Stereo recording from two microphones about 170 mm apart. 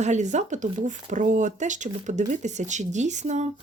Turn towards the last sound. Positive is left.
turn(degrees=-45)  # may be behind; listen again after turning